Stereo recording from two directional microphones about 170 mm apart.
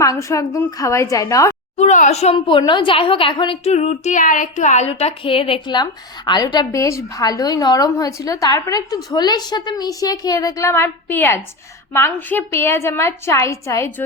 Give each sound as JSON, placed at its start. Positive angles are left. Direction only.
{"t": 0.0, "sound": "a woman's voice", "side_deg": 20}
{"t": 1.7, "sound": "a woman's voice", "side_deg": 40}